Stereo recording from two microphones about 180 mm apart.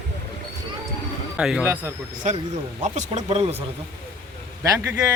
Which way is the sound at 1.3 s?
5° right (ahead or behind).